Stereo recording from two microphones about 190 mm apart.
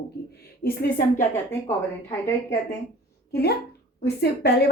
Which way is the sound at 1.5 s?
15° left (ahead or behind).